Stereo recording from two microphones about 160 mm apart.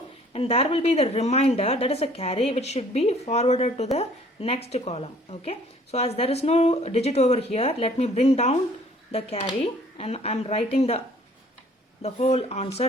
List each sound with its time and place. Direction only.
0.3 s a woman's voice: 35° left (ahead or behind)
12.0 s a woman's voice: 40° left (ahead or behind)